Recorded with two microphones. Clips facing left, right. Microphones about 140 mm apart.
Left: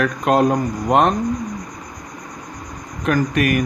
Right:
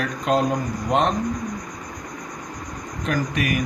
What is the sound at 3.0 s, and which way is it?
Speech, 55° left (ahead or behind).